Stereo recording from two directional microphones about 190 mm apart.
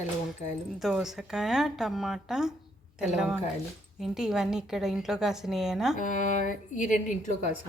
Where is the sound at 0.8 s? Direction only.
Centre (ahead or behind).